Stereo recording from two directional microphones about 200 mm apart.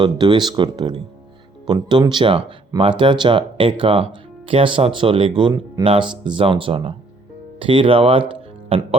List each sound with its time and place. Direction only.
0.0 s speech: 20° right (ahead or behind)